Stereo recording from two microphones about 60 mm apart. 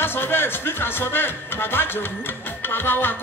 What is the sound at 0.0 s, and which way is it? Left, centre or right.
Speech, left.